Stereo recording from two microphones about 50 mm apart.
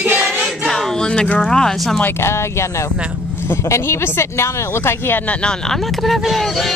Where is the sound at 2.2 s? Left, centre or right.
Left.